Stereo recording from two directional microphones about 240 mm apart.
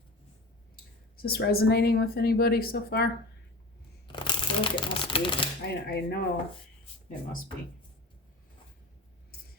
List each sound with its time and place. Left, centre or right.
1.1 s a woman's voice: left
4.1 s speech: centre
5.6 s a woman's voice: left